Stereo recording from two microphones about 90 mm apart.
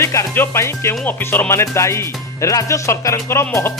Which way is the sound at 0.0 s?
30° left (ahead or behind).